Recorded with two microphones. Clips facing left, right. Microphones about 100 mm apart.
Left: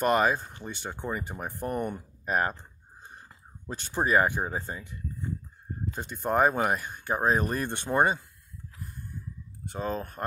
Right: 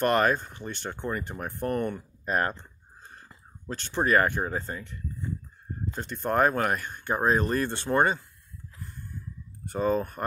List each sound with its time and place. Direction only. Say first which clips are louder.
0.0 s speech: right 1 dB; 5° left (ahead or behind)
5.9 s speech: even; 10° left (ahead or behind)
9.7 s speech: right 6 dB; centre (ahead or behind)